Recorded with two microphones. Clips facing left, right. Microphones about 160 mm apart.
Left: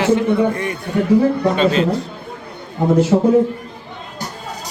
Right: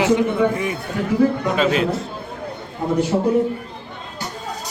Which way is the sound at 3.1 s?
90° left.